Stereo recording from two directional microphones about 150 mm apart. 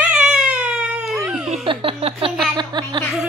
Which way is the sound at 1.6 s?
40° right (ahead or behind).